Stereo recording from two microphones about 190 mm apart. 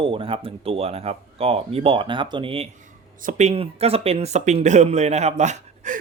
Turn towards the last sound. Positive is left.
turn(degrees=-40)  # may be behind; listen again after turning